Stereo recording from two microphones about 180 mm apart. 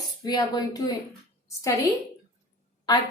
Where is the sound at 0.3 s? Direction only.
20° left (ahead or behind).